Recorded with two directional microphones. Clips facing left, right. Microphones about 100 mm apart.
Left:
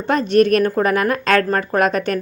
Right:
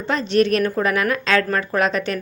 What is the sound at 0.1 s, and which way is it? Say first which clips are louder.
Speech: left 4 dB; 50° left (ahead or behind).